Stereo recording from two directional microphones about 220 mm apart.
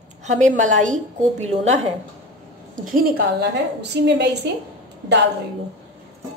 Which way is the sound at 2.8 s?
40° right (ahead or behind).